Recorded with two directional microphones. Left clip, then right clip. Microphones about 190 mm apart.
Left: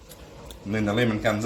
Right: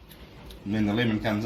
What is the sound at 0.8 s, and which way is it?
Speech, 20° left (ahead or behind).